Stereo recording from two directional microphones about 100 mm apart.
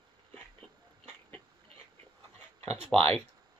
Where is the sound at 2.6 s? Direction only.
90° right.